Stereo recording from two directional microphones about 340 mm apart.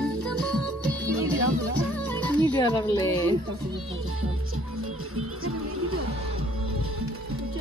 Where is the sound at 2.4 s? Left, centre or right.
Centre.